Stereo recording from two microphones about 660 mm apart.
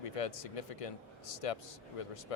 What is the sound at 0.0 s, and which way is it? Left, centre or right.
Speech, left.